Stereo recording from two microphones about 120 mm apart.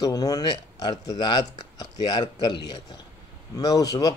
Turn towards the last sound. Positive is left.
turn(degrees=30)  # may be behind; listen again after turning